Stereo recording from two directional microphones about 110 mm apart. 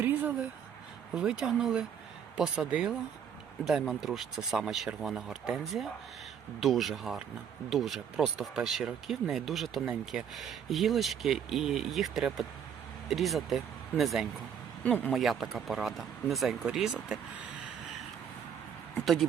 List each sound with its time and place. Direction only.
0.0 s a sound: 20° right (ahead or behind)
1.1 s speech: 5° right (ahead or behind)
14.8 s speech: 15° left (ahead or behind)
15.1 s speech: centre (ahead or behind)